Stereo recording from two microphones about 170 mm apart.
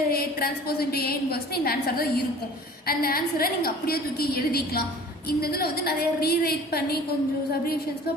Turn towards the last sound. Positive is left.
turn(degrees=65)  # may be behind; listen again after turning